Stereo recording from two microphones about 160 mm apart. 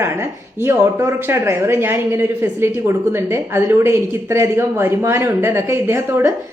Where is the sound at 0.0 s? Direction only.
15° right (ahead or behind).